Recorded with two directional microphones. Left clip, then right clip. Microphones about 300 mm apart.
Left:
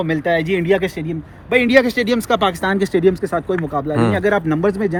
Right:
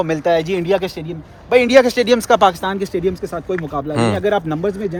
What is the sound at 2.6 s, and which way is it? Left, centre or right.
Speech, centre.